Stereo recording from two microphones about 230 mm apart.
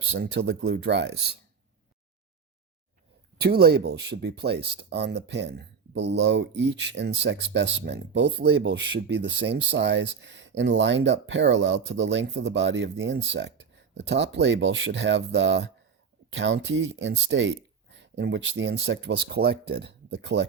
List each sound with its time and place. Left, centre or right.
0.2 s speech: right
3.4 s speech: right